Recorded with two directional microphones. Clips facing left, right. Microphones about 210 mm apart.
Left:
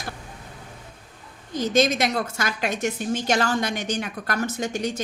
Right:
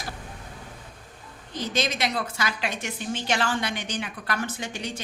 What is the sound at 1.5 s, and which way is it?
A woman's voice, 45° left (ahead or behind).